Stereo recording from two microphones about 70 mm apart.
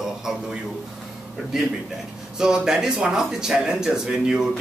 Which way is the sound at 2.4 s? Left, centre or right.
Centre.